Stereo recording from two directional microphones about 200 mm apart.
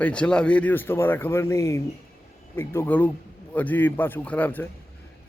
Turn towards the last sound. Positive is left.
turn(degrees=10)  # may be behind; listen again after turning